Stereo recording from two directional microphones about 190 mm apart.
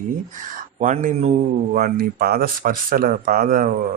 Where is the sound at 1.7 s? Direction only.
50° right (ahead or behind).